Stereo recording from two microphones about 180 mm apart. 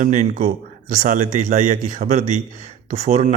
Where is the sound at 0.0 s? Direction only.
45° right (ahead or behind).